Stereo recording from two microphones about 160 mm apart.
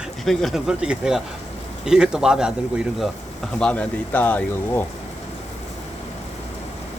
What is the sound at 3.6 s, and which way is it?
Speech, 5° left (ahead or behind).